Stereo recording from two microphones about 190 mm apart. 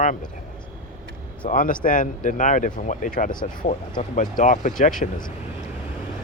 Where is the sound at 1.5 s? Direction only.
45° left (ahead or behind).